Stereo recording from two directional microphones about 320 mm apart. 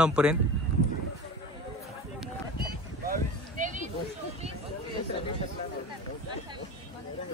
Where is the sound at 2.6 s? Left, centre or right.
Right.